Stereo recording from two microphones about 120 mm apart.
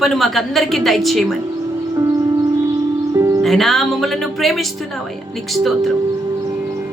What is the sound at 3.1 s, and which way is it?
Music, 30° right (ahead or behind).